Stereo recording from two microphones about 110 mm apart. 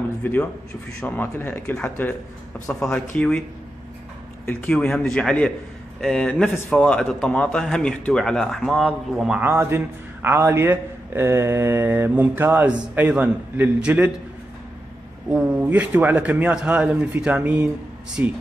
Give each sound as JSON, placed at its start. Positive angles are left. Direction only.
{"t": 0.2, "sound": "speech", "side_deg": 15}
{"t": 4.5, "sound": "speech", "side_deg": 15}
{"t": 4.7, "sound": "a man's voice", "side_deg": 5}
{"t": 9.4, "sound": "a man's voice", "side_deg": -20}
{"t": 15.2, "sound": "a man's voice", "side_deg": -10}